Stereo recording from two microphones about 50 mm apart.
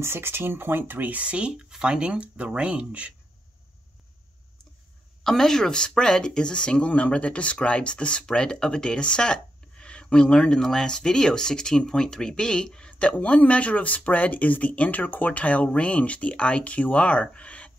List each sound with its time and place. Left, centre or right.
0.0 s speech: right
5.2 s speech: centre; by 17.7 s left